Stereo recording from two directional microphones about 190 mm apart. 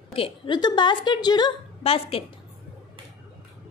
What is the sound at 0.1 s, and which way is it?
A woman's voice, 25° left (ahead or behind).